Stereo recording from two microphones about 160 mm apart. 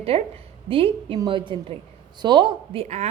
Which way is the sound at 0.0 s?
40° right (ahead or behind).